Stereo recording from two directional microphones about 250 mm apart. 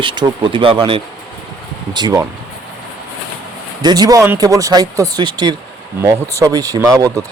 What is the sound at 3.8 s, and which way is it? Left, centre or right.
A man's voice, centre.